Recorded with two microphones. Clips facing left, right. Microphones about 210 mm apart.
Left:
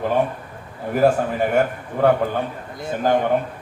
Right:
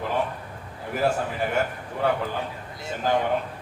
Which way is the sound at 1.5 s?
55° left (ahead or behind).